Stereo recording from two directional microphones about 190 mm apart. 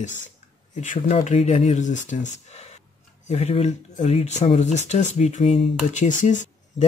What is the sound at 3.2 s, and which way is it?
Speech, 35° left (ahead or behind).